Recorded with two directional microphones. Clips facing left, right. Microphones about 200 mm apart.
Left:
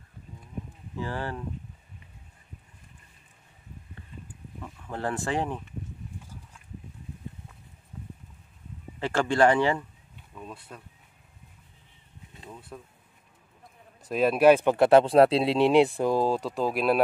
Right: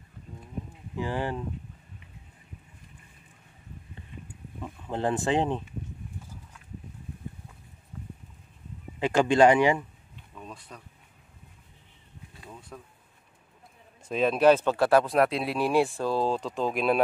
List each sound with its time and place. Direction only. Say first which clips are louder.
0.9 s speech: right 3 dB; 15° right (ahead or behind)
4.6 s speech: right 4 dB; 20° right (ahead or behind)
9.0 s speech: right 3 dB; 15° right (ahead or behind)
10.3 s a sound: left 2 dB; 5° left (ahead or behind)
12.4 s bee: left 2 dB; 5° left (ahead or behind)
14.0 s speech: left 2 dB; 5° left (ahead or behind)